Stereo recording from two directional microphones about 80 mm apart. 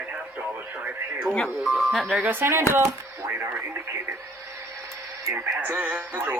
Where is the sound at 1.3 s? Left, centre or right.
Centre.